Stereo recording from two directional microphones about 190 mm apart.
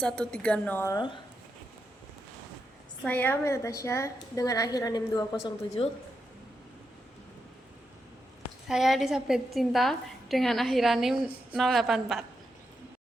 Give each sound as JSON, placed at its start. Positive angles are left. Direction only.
{"t": 0.0, "sound": "a woman's voice", "side_deg": 5}
{"t": 3.0, "sound": "a woman's voice", "side_deg": 10}
{"t": 8.6, "sound": "a woman's voice", "side_deg": 0}